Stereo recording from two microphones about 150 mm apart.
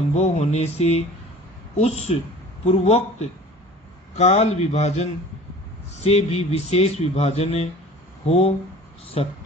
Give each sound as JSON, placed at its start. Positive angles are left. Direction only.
{"t": 0.1, "sound": "speech", "side_deg": 45}
{"t": 6.0, "sound": "speech", "side_deg": 45}